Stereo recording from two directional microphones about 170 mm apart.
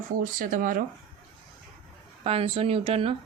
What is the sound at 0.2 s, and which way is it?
Speech, 50° right (ahead or behind).